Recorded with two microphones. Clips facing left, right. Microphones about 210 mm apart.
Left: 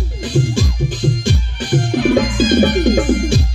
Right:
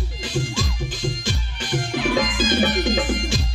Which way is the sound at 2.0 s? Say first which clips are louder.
Left 8 dB; 55° left (ahead or behind).